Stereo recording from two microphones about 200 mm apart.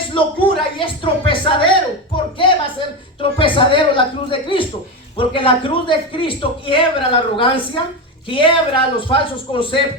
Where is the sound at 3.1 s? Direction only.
25° left (ahead or behind).